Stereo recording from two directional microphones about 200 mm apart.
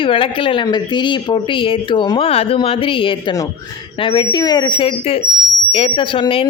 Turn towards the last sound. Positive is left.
turn(degrees=25)  # may be behind; listen again after turning